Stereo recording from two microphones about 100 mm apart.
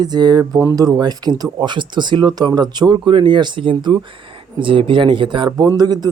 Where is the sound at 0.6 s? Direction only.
35° right (ahead or behind); by 5.4 s 55° right (ahead or behind).